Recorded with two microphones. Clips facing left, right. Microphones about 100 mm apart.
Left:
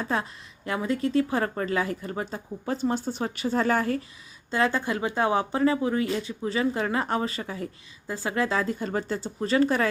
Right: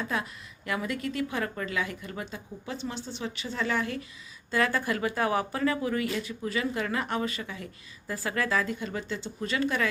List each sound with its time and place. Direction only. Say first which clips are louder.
0.0 s a woman's voice: left 4 dB; 35° left (ahead or behind)
4.5 s speech: left 2 dB; 25° left (ahead or behind)
8.0 s a woman's voice: left 3 dB; 20° left (ahead or behind)